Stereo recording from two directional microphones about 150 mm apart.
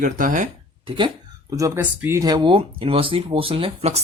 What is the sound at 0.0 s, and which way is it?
Speech, 60° right (ahead or behind).